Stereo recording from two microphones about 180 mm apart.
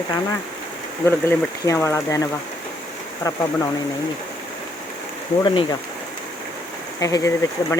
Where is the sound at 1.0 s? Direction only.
15° left (ahead or behind).